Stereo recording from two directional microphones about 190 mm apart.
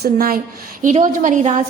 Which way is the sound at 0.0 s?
50° right (ahead or behind).